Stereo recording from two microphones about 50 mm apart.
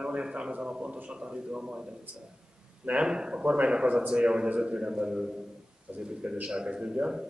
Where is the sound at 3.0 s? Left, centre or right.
Centre.